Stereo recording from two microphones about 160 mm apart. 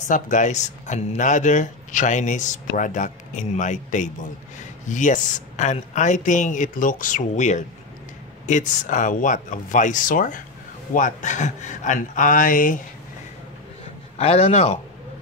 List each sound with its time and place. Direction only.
0.1 s a man's voice: 50° left (ahead or behind)
14.1 s a man's voice: 40° left (ahead or behind)